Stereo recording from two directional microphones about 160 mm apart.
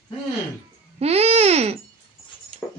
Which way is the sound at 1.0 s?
40° right (ahead or behind).